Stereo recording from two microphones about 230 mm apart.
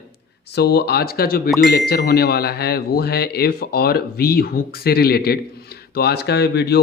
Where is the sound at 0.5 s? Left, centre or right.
Left.